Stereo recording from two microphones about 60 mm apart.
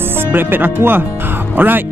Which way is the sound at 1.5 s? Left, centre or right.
Right.